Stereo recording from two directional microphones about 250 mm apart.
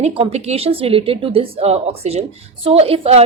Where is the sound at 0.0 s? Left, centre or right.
Right.